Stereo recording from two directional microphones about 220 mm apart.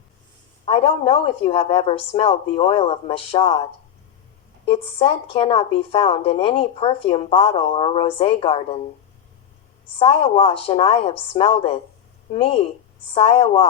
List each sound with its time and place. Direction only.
0.6 s a woman's voice: 25° left (ahead or behind)
4.6 s a woman's voice: 25° left (ahead or behind)
10.0 s a woman's voice: 25° left (ahead or behind)